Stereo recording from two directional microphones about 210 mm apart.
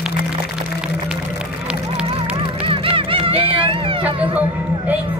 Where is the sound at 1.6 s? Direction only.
5° right (ahead or behind).